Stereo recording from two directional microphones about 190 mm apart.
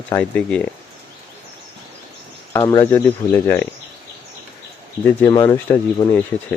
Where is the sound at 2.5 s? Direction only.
15° left (ahead or behind).